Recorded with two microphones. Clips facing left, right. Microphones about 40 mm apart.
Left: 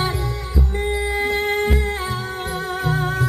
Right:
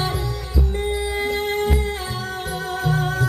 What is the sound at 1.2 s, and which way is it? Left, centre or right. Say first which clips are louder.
Music: left 2 dB; left.